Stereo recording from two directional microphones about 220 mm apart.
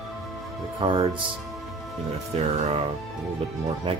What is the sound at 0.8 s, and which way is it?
Speech, 20° right (ahead or behind).